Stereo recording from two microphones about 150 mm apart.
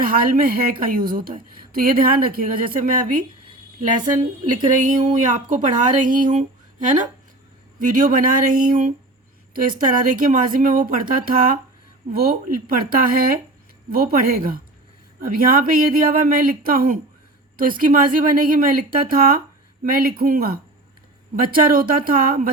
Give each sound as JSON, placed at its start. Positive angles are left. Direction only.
{"t": 0.0, "sound": "a woman's voice", "side_deg": -70}
{"t": 4.7, "sound": "speech", "side_deg": -60}
{"t": 12.1, "sound": "a woman's voice", "side_deg": -85}